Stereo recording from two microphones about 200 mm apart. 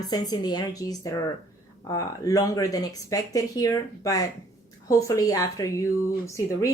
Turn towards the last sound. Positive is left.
turn(degrees=15)  # may be behind; listen again after turning